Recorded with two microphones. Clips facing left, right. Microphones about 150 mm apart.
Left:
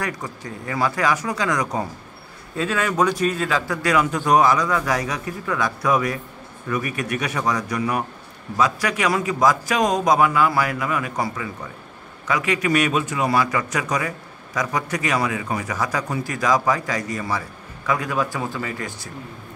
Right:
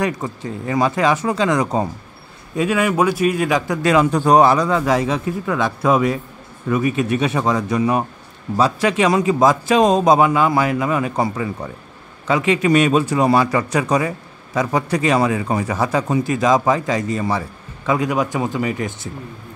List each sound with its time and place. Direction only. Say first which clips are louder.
0.0 s a man's voice: right 7 dB; 25° right (ahead or behind)
2.5 s a man's voice: right 5 dB; 15° right (ahead or behind)